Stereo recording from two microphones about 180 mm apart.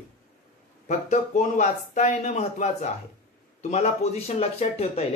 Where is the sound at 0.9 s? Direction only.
45° left (ahead or behind).